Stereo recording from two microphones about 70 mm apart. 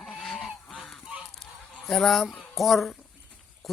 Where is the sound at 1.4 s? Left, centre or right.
Centre.